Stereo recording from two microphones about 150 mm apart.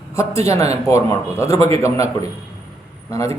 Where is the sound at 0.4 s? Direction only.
20° left (ahead or behind).